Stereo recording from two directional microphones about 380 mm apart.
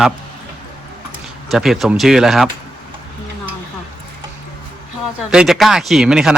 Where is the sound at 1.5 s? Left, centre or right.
Centre.